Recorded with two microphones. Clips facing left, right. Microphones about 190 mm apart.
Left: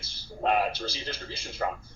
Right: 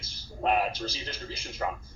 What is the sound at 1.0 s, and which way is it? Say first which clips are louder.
Speech: left 1 dB; 30° left (ahead or behind).